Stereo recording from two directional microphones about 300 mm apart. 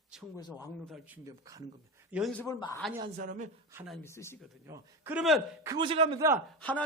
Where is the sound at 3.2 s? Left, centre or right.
Right.